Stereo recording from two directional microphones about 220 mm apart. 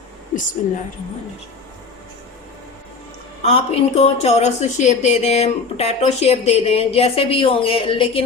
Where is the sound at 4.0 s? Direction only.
30° left (ahead or behind).